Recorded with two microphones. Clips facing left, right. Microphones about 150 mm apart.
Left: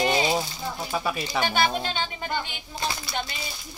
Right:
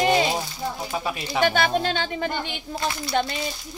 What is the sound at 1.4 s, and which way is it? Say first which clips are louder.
Speech: right 5 dB; 50° right (ahead or behind).